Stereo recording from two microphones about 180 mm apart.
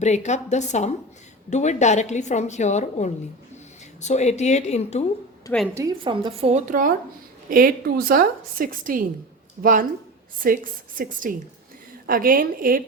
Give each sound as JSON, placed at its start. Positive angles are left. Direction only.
{"t": 0.0, "sound": "a woman's voice", "side_deg": 40}
{"t": 5.7, "sound": "a woman's voice", "side_deg": -20}
{"t": 6.7, "sound": "a woman's voice", "side_deg": -50}
{"t": 10.4, "sound": "a woman's voice", "side_deg": -50}